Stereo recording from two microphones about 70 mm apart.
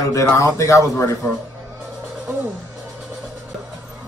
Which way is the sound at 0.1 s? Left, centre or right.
Left.